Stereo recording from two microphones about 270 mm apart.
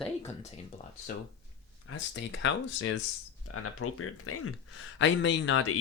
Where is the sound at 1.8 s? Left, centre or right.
Left.